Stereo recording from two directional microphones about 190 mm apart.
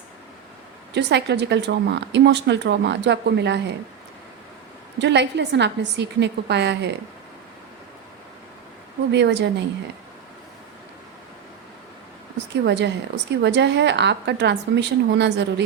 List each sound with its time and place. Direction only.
0.9 s a woman's voice: 65° right (ahead or behind)
4.9 s a woman's voice: 65° right (ahead or behind)
9.1 s a woman's voice: 65° right (ahead or behind)
12.6 s a woman's voice: 65° right (ahead or behind)